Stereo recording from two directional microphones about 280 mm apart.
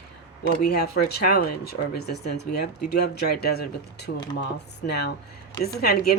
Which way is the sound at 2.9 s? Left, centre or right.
Left.